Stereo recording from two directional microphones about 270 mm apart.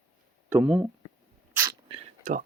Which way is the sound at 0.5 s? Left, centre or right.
Centre.